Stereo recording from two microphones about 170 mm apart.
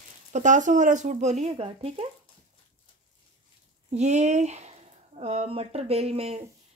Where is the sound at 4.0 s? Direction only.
45° right (ahead or behind).